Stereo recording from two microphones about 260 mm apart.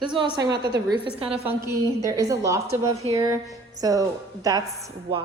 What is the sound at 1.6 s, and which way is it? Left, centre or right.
A woman's voice, centre.